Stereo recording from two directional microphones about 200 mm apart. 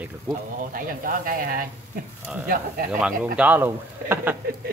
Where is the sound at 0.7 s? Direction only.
45° right (ahead or behind).